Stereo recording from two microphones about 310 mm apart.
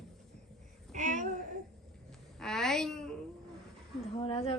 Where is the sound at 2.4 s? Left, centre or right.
Centre.